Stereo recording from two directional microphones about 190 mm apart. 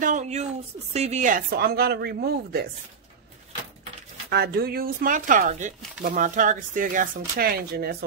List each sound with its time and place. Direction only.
0.0 s a sound: 40° right (ahead or behind)
0.9 s speech: 35° right (ahead or behind); by 2.7 s 55° right (ahead or behind)
4.3 s speech: 55° right (ahead or behind)